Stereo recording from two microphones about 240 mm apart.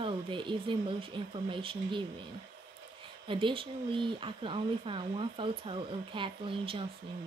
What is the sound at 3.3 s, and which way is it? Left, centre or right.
Speech, right.